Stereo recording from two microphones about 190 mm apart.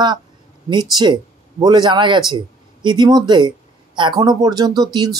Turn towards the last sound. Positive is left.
turn(degrees=-20)  # may be behind; listen again after turning